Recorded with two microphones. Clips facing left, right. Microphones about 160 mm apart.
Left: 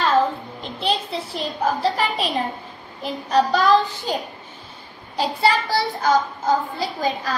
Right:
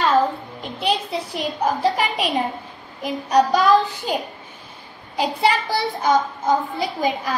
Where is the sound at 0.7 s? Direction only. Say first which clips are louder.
Right 1 dB; 10° right (ahead or behind).